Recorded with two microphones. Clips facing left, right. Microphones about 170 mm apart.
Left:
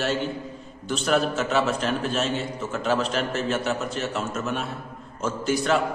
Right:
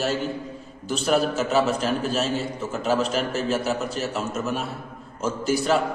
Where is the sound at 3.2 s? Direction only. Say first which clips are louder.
Right 1 dB; 40° right (ahead or behind).